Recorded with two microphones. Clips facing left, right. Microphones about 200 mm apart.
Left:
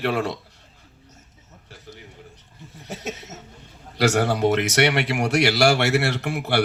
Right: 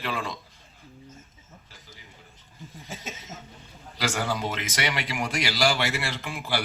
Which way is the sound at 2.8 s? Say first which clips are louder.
Left 8 dB; 70° left (ahead or behind).